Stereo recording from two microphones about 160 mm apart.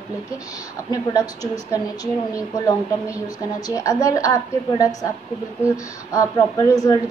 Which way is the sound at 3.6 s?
20° left (ahead or behind).